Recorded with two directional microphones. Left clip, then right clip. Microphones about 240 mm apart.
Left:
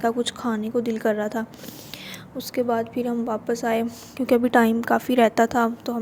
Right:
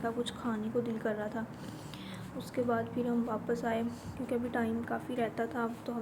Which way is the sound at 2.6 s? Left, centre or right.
Left.